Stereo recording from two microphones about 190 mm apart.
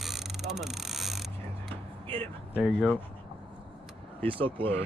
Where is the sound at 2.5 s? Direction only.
5° right (ahead or behind).